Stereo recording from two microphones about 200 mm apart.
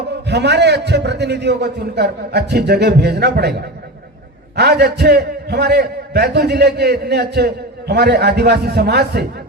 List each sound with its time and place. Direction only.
0.3 s a man's voice: 55° right (ahead or behind)
4.5 s a man's voice: 55° right (ahead or behind)